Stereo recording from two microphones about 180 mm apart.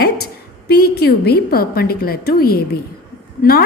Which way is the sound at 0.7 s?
60° left (ahead or behind).